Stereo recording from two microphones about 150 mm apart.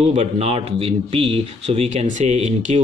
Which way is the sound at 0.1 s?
45° right (ahead or behind).